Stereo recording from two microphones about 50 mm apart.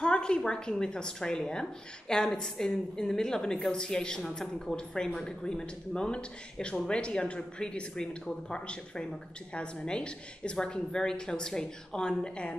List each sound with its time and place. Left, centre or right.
0.0 s speech: centre